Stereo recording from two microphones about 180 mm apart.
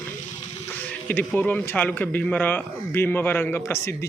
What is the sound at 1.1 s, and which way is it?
A man's voice, 10° left (ahead or behind).